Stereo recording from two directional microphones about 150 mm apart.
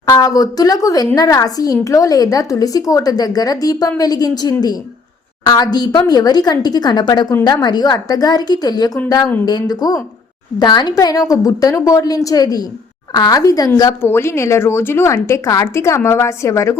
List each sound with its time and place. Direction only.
0.0 s speech: 25° left (ahead or behind)